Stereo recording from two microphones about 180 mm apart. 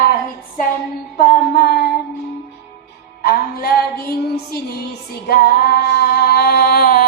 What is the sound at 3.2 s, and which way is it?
Music, 60° left (ahead or behind).